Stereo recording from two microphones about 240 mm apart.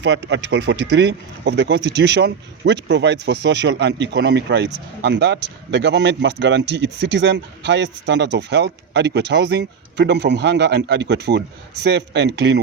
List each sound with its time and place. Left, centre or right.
0.0 s speech: right